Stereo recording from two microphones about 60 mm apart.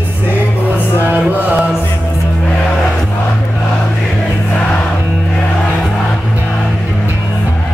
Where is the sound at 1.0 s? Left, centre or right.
Right.